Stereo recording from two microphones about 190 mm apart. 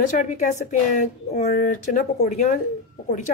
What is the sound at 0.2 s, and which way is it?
A woman's voice, 40° left (ahead or behind).